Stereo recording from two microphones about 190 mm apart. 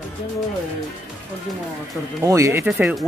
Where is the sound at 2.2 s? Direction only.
15° right (ahead or behind).